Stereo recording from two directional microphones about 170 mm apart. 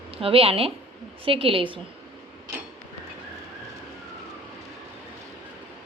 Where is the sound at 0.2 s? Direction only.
35° right (ahead or behind).